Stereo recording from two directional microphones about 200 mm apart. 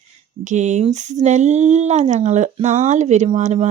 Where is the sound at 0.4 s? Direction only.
35° right (ahead or behind).